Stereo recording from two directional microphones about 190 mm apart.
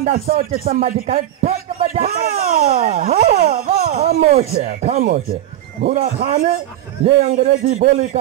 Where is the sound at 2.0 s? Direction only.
50° right (ahead or behind).